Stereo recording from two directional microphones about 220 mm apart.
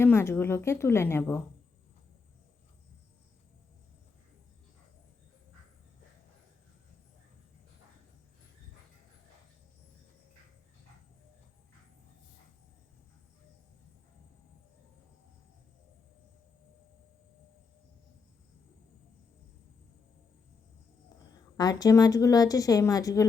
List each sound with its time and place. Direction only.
0.0 s a woman's voice: 10° left (ahead or behind)
21.6 s a woman's voice: 15° left (ahead or behind)